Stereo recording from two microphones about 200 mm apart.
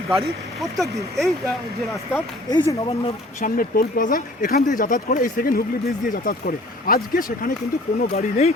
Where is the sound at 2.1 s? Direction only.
15° left (ahead or behind).